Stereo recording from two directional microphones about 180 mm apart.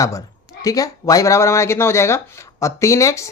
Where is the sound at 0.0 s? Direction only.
20° left (ahead or behind).